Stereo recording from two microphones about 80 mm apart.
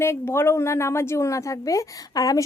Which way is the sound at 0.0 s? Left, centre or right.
Left.